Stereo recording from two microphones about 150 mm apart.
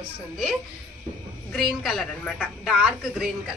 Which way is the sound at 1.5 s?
5° left (ahead or behind).